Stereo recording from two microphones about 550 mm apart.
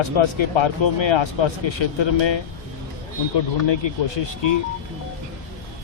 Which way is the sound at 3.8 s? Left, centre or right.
Left.